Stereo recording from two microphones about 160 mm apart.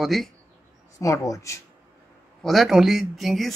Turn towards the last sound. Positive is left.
turn(degrees=0)  # may be behind; listen again after turning